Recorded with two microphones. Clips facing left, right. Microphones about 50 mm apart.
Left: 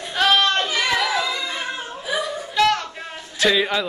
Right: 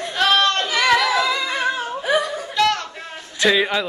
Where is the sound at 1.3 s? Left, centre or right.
Right.